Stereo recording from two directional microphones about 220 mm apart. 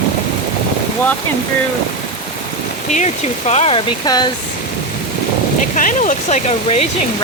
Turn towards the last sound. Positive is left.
turn(degrees=30)  # may be behind; listen again after turning